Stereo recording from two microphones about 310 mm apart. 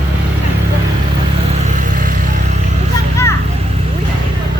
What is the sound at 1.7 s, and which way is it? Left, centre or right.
Vehicle, right.